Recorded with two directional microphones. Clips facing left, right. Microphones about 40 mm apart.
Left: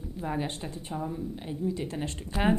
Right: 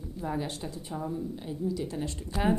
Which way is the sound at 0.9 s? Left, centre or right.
Left.